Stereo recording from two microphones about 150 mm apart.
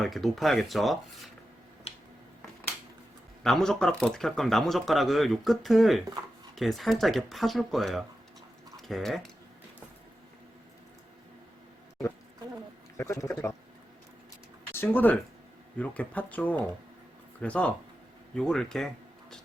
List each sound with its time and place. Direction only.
0.0 s speech: centre (ahead or behind)
1.9 s finger snapping: 40° left (ahead or behind)
3.4 s speech: 5° left (ahead or behind)
13.0 s speech: 20° left (ahead or behind)
14.7 s speech: 15° left (ahead or behind)